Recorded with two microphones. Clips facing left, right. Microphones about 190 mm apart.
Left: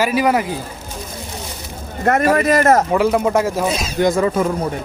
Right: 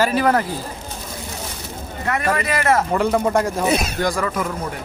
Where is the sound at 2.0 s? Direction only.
45° left (ahead or behind).